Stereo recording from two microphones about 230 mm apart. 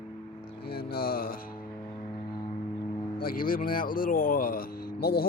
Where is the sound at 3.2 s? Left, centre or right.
Left.